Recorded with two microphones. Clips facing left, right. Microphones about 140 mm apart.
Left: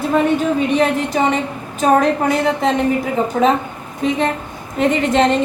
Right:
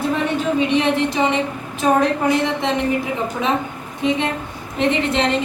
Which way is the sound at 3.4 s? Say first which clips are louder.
Left 9 dB; 55° left (ahead or behind).